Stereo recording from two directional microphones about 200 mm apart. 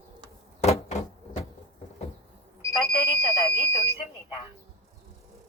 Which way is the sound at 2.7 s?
Centre (ahead or behind).